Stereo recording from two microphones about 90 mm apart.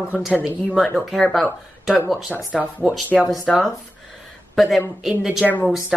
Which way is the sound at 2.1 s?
5° right (ahead or behind).